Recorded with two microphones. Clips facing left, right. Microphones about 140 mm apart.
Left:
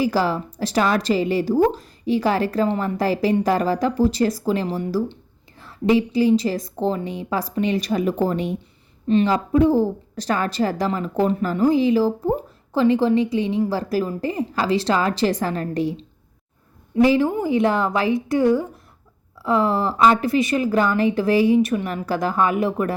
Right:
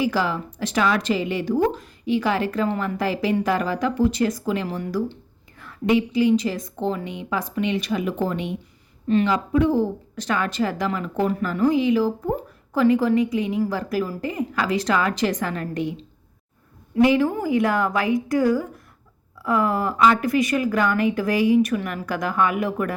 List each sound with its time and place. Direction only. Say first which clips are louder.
0.0 s a woman's voice: left 2 dB; 35° left (ahead or behind)